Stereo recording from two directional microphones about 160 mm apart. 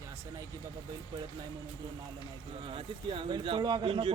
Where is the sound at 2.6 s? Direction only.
35° right (ahead or behind).